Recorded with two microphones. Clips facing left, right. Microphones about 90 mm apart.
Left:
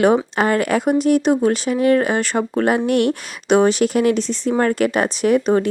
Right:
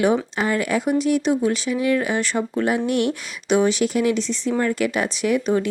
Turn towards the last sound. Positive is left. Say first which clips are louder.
# left 4 dB
turn(degrees=40)  # may be behind; listen again after turning